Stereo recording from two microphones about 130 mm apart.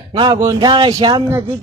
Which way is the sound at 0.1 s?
35° right (ahead or behind).